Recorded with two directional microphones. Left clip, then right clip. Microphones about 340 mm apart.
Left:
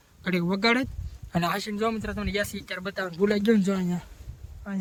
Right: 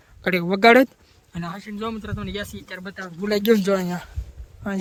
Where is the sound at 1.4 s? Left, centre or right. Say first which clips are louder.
Left 6 dB; centre.